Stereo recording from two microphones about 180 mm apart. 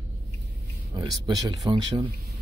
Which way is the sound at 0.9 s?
25° right (ahead or behind).